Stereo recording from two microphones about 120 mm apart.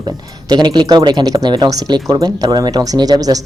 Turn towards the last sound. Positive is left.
turn(degrees=-30)  # may be behind; listen again after turning